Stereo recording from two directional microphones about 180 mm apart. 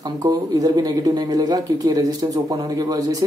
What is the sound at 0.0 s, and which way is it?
Speech, 20° right (ahead or behind).